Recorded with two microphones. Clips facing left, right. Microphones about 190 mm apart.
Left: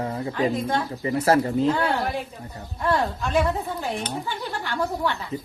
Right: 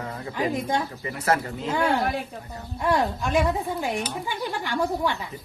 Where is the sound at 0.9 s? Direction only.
35° left (ahead or behind).